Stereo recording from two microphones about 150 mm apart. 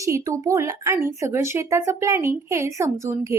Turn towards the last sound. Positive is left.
turn(degrees=-20)  # may be behind; listen again after turning